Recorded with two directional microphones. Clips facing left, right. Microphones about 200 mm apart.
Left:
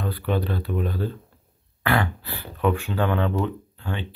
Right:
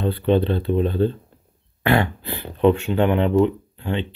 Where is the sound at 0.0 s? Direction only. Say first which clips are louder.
Right 7 dB; 25° right (ahead or behind).